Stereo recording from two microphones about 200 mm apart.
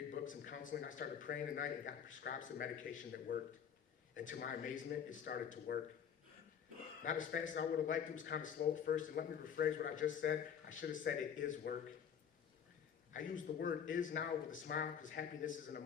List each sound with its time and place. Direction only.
0.1 s speech: 40° left (ahead or behind)
7.0 s speech: 40° left (ahead or behind)
13.6 s speech: 40° left (ahead or behind)